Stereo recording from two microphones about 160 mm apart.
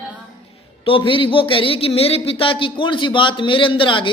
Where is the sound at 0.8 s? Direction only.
30° left (ahead or behind).